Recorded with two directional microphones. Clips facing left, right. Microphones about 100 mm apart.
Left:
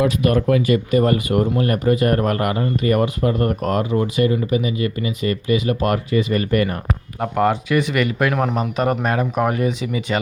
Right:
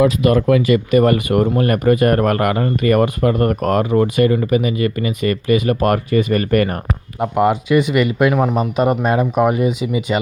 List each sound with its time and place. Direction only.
0.2 s speech: 90° right; by 6.7 s 55° right (ahead or behind)
7.2 s speech: 15° right (ahead or behind)
8.3 s speech: 10° right (ahead or behind)
8.5 s speech: 20° right (ahead or behind)